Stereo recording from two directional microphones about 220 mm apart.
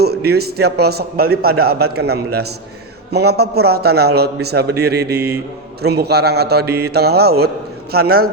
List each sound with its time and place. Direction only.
0.0 s a man's voice: 45° right (ahead or behind)